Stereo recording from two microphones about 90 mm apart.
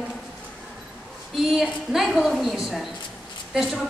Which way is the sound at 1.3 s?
5° right (ahead or behind).